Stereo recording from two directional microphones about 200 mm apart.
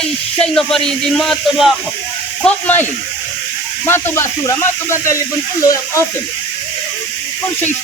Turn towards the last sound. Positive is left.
turn(degrees=15)  # may be behind; listen again after turning